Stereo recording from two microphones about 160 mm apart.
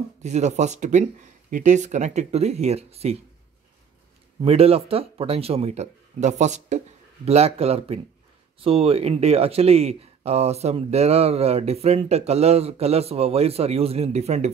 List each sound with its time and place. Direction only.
0.2 s speech: 45° right (ahead or behind)
4.4 s speech: 40° right (ahead or behind)